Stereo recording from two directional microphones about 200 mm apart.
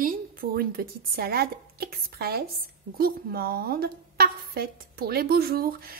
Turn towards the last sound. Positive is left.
turn(degrees=-45)  # may be behind; listen again after turning